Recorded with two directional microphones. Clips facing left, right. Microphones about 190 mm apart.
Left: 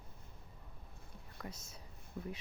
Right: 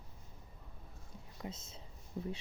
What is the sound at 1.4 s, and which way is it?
Speech, 25° right (ahead or behind).